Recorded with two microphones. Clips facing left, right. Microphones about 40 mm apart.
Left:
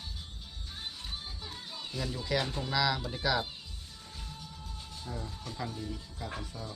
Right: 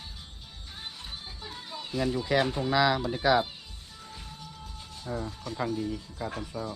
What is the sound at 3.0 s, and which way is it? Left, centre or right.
Speech, centre.